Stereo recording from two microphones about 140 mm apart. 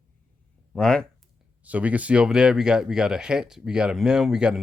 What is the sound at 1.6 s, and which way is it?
Speech, 10° right (ahead or behind).